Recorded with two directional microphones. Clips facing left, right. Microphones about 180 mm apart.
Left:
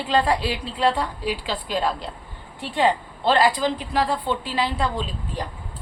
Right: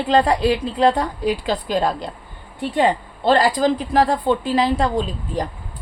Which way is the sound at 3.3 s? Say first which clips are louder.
Right 3 dB; 45° right (ahead or behind).